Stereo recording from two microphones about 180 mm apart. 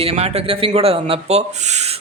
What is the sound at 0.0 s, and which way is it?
A woman's voice, 35° right (ahead or behind).